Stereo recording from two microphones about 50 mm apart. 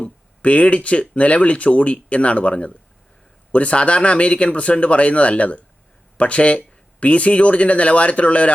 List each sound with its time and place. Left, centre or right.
0.0 s speech: left